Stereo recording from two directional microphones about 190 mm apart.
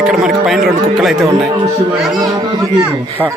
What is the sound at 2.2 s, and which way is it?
A man's voice, 20° right (ahead or behind).